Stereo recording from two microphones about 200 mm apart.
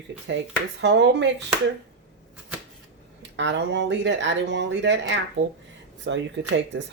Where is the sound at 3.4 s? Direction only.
60° right (ahead or behind).